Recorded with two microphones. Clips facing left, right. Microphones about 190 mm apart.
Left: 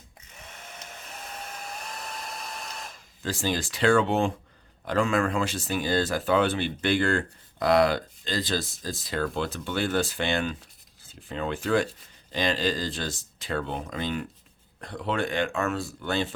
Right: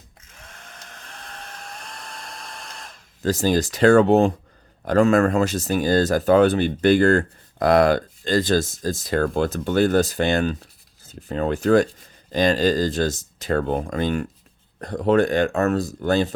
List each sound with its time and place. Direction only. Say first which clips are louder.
0.5 s vacuum cleaner: left 1 dB; 5° left (ahead or behind)
3.2 s speech: right 9 dB; 40° right (ahead or behind)